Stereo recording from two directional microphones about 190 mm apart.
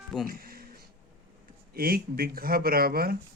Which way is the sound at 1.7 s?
50° right (ahead or behind).